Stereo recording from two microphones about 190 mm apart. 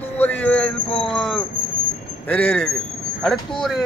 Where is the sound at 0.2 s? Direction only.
10° left (ahead or behind).